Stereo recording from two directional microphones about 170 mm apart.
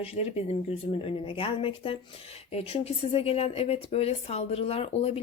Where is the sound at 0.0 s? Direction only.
35° left (ahead or behind).